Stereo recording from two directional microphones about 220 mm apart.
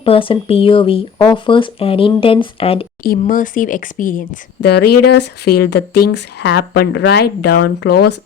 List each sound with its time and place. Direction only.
0.0 s speech: 25° left (ahead or behind)
3.0 s speech: 40° left (ahead or behind)
5.9 s speech: 90° left
6.4 s speech: 50° left (ahead or behind)